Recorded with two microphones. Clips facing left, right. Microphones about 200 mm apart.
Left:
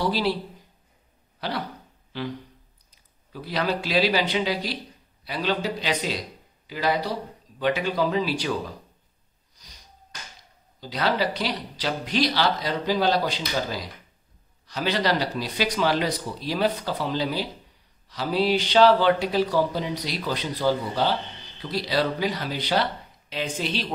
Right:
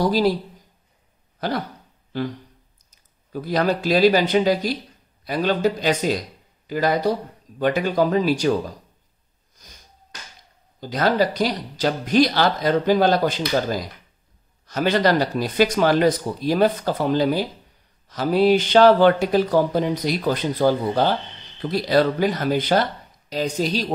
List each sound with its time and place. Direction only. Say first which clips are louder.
0.0 s speech: right 6 dB; 45° right (ahead or behind)
1.4 s speech: right 5 dB; 45° right (ahead or behind)
9.6 s sniff: right 4 dB; 50° right (ahead or behind)
10.8 s speech: right 5 dB; 50° right (ahead or behind)